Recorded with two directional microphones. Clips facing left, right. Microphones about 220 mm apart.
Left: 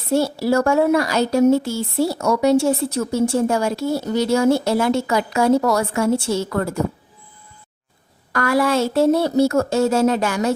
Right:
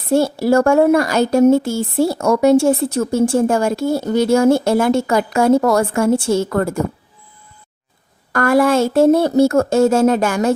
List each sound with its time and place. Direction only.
0.1 s speech: 50° right (ahead or behind)
8.3 s speech: 50° right (ahead or behind)